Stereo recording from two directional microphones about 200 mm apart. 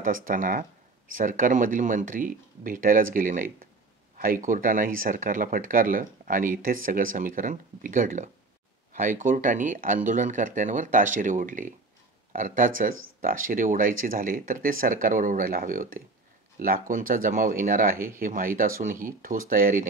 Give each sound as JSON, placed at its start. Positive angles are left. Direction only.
{"t": 0.0, "sound": "speech", "side_deg": -45}
{"t": 17.9, "sound": "speech", "side_deg": -10}
{"t": 18.2, "sound": "speech", "side_deg": -45}